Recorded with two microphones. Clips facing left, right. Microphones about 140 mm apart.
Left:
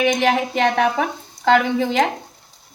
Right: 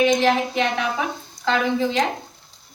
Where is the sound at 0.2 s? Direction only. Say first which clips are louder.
Left 2 dB; 70° left (ahead or behind).